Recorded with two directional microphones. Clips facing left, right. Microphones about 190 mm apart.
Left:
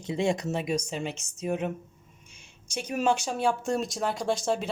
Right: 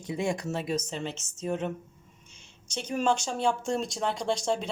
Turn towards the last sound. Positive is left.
turn(degrees=5)  # may be behind; listen again after turning